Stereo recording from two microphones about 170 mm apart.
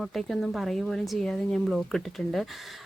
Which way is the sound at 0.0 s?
Centre (ahead or behind).